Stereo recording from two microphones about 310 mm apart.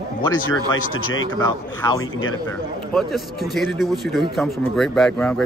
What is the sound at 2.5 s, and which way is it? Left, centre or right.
Speech, centre.